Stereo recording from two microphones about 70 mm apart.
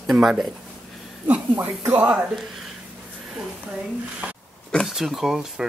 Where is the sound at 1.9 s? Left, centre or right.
Centre.